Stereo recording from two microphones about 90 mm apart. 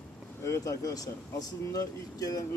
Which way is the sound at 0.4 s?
35° left (ahead or behind).